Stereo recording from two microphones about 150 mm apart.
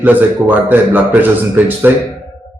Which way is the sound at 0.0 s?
10° right (ahead or behind).